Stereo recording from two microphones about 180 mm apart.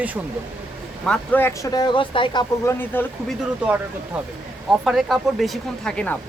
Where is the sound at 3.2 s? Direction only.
5° right (ahead or behind).